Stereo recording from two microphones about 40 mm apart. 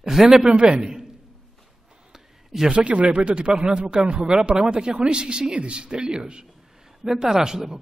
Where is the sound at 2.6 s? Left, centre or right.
Right.